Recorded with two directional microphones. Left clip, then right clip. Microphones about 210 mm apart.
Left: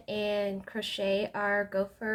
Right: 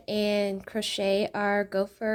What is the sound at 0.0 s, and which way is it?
Speech, 45° right (ahead or behind).